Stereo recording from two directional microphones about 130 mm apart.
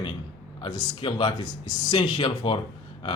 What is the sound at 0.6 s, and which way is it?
Speech, 40° left (ahead or behind).